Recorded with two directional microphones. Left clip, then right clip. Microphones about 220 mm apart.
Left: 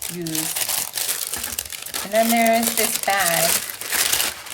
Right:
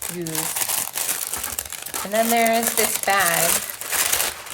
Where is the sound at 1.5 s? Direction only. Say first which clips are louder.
Left 1 dB; 15° right (ahead or behind).